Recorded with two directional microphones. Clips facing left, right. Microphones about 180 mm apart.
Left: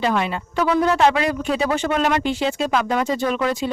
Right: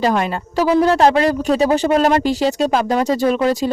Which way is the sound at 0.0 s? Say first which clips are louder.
Right 4 dB; 40° right (ahead or behind).